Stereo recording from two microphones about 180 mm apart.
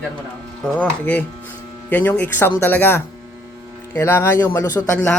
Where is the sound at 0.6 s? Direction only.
5° left (ahead or behind).